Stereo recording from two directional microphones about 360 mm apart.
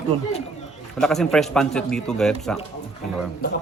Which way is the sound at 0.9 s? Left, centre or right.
Centre.